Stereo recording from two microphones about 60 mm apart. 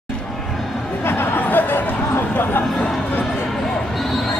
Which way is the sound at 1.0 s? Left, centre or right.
Left.